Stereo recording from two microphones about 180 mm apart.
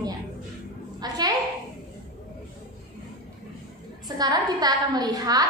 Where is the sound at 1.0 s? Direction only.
20° right (ahead or behind).